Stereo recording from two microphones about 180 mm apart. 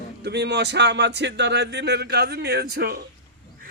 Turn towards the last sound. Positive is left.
turn(degrees=-60)  # may be behind; listen again after turning